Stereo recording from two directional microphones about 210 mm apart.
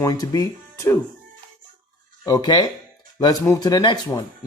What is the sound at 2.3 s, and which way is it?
Speech, 20° left (ahead or behind).